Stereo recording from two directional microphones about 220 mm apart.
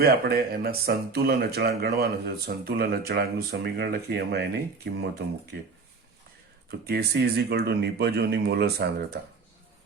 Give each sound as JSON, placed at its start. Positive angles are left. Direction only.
{"t": 0.0, "sound": "speech", "side_deg": -45}
{"t": 6.7, "sound": "speech", "side_deg": -45}